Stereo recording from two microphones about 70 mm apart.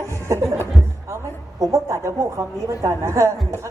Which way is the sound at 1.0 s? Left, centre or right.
Right.